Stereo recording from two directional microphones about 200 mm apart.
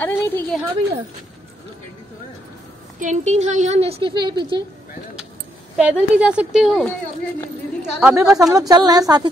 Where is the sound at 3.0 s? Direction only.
35° right (ahead or behind).